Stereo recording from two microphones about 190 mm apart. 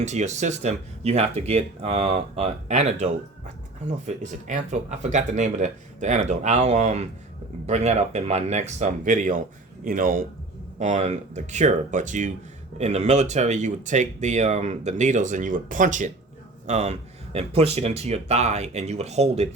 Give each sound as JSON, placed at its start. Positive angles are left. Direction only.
{"t": 0.0, "sound": "speech", "side_deg": -40}